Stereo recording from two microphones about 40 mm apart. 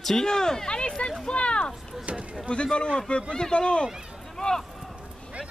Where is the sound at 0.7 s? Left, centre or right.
Left.